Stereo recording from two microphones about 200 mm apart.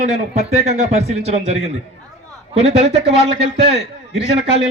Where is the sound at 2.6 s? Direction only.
35° right (ahead or behind).